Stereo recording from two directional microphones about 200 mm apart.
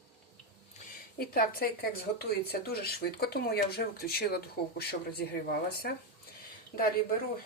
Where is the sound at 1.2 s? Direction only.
50° left (ahead or behind).